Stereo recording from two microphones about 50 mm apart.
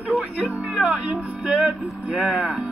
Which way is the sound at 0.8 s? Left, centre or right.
Right.